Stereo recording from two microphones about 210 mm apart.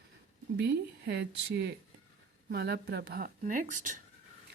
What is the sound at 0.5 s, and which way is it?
Speech, 50° right (ahead or behind).